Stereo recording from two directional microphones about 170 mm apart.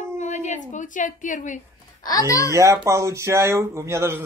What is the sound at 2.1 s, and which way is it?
Speech, 20° left (ahead or behind).